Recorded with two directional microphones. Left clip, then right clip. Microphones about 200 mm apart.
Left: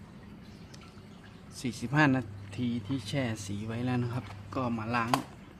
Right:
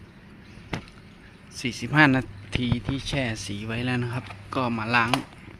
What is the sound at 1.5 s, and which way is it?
Speech, 10° right (ahead or behind).